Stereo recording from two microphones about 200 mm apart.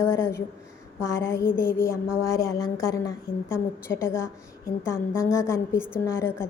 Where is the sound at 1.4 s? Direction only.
45° left (ahead or behind).